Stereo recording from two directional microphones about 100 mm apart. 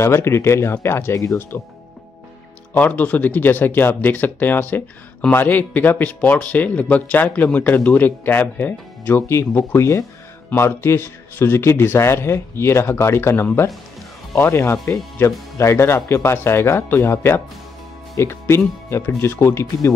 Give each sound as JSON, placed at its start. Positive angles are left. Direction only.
{"t": 0.0, "sound": "speech", "side_deg": 25}
{"t": 2.7, "sound": "speech", "side_deg": 15}